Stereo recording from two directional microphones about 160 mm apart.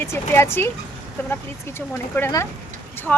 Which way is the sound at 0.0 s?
15° left (ahead or behind).